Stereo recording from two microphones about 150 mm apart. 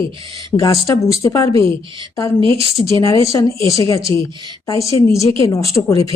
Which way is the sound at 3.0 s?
20° left (ahead or behind).